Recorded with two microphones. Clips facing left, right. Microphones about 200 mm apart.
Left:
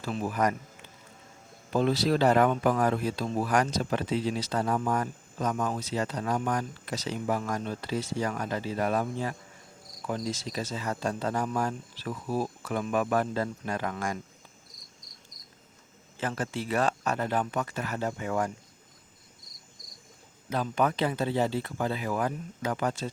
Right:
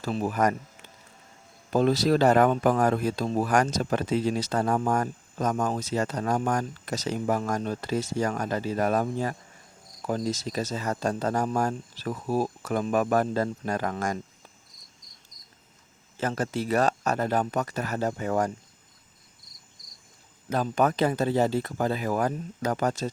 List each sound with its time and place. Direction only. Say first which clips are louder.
0.0 s speech: right 3 dB; 40° right (ahead or behind)
1.7 s speech: right 3 dB; 45° right (ahead or behind)
16.2 s speech: right 4 dB; 40° right (ahead or behind)
20.5 s speech: right 3 dB; 45° right (ahead or behind)